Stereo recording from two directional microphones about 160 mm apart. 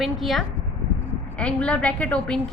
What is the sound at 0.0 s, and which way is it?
A woman's voice, centre (ahead or behind).